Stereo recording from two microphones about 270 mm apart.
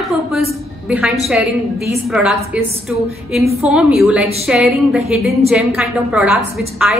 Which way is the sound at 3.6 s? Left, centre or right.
Centre.